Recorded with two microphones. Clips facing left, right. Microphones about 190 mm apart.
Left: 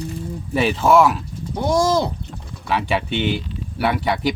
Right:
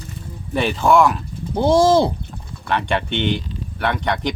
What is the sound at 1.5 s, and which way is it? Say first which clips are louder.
Speech: right 4 dB; 30° right (ahead or behind).